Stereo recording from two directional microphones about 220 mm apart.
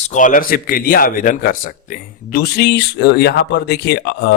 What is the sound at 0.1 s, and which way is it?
A man's voice, 35° left (ahead or behind).